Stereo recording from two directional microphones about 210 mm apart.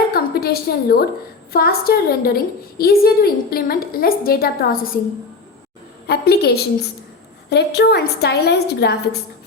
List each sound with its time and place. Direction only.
0.1 s a sound: 45° left (ahead or behind)
1.5 s a woman's voice: 45° left (ahead or behind)
6.1 s a woman's voice: 50° left (ahead or behind)